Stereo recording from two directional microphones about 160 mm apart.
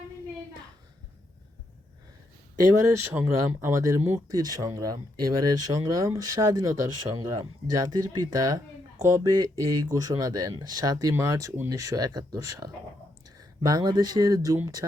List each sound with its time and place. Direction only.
2.7 s speech: 15° right (ahead or behind)